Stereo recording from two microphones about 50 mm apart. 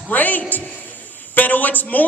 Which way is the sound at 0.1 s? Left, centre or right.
Left.